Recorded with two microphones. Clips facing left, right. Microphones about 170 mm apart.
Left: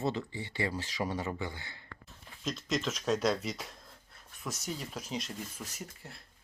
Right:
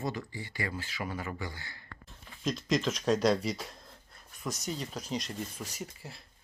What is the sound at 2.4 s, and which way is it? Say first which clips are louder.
Speech: right 4 dB; centre (ahead or behind).